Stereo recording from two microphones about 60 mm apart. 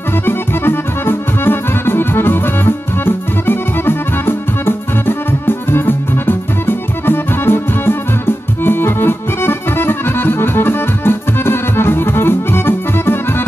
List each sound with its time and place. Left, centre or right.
0.2 s music: left